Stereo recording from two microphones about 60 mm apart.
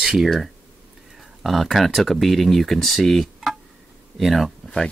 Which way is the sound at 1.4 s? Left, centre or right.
Centre.